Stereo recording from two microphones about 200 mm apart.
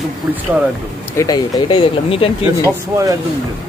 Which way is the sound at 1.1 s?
20° left (ahead or behind).